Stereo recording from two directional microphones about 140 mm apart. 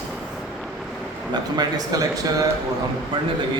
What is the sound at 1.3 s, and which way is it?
Speech, 30° right (ahead or behind).